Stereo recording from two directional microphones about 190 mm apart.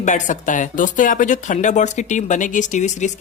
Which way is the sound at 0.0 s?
40° left (ahead or behind).